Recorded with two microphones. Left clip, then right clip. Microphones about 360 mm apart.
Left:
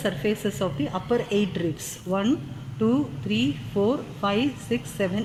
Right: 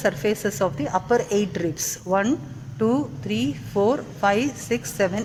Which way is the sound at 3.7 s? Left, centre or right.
Right.